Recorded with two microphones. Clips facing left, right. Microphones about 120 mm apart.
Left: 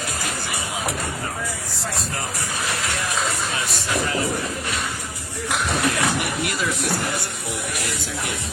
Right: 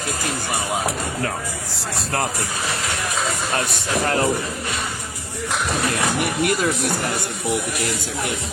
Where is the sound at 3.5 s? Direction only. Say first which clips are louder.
Right 3 dB; 60° right (ahead or behind).